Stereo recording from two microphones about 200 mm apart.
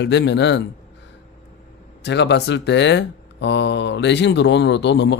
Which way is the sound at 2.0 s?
60° left (ahead or behind).